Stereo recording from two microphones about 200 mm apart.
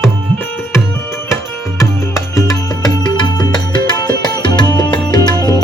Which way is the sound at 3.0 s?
20° left (ahead or behind).